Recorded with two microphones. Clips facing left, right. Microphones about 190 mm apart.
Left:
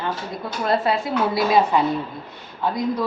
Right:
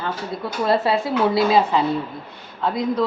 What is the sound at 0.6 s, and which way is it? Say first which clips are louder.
Speech: right 1 dB; 25° right (ahead or behind).